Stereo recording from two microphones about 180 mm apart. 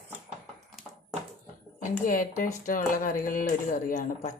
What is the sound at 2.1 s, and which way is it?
Speech, 50° left (ahead or behind).